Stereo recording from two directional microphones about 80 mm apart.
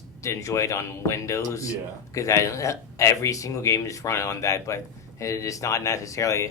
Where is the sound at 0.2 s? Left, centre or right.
Left.